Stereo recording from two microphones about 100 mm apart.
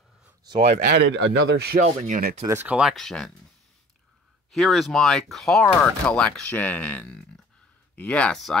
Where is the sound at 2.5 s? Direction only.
20° right (ahead or behind).